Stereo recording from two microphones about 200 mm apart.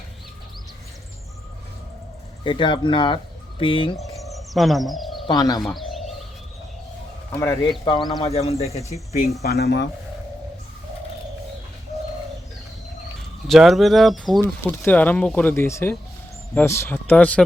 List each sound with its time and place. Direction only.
2.4 s speech: 25° left (ahead or behind)
4.2 s bird: centre (ahead or behind)
5.2 s speech: 20° left (ahead or behind)
5.5 s bird: centre (ahead or behind)
7.3 s speech: 15° left (ahead or behind); by 8.8 s 30° left (ahead or behind)
8.9 s speech: 45° left (ahead or behind)
13.5 s speech: centre (ahead or behind)